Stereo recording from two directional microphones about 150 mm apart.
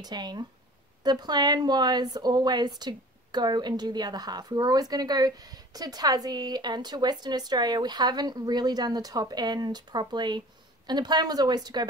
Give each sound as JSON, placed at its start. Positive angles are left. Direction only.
{"t": 0.0, "sound": "speech", "side_deg": -30}